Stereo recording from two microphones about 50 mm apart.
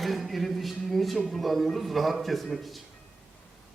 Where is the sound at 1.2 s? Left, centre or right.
Centre.